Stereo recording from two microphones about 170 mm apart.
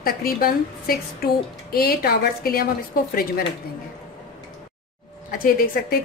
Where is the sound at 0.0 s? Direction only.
60° left (ahead or behind).